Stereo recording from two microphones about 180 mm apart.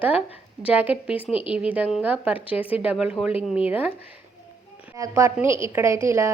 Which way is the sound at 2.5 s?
30° left (ahead or behind).